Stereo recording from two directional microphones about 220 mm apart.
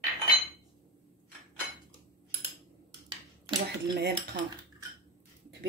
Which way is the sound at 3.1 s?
20° right (ahead or behind).